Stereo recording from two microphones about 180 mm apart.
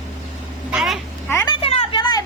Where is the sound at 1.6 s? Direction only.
30° left (ahead or behind).